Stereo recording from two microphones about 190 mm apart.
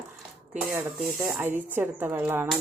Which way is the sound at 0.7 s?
5° right (ahead or behind).